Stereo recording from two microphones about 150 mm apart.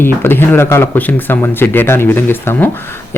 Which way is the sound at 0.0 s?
15° left (ahead or behind).